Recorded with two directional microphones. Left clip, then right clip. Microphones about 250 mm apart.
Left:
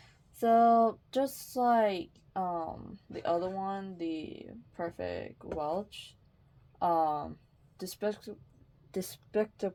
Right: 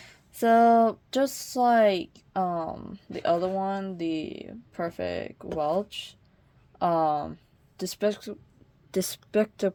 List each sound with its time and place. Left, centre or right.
0.0 s speech: right